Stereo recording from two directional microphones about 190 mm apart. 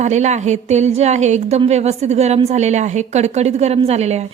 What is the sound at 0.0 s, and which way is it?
A woman's voice, 35° right (ahead or behind).